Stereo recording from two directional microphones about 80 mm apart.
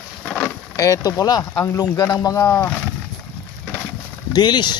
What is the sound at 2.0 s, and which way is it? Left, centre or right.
Speech, left.